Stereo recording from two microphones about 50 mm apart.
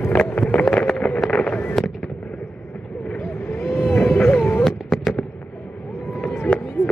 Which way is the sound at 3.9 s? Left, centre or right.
Left.